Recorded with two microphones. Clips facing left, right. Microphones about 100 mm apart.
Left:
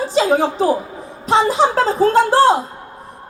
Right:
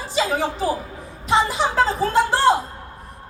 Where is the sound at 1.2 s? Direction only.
40° left (ahead or behind).